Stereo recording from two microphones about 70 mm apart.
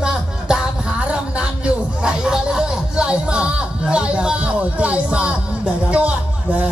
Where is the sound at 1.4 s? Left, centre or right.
Centre.